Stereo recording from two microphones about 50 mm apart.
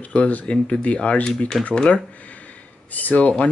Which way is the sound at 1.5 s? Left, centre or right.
Centre.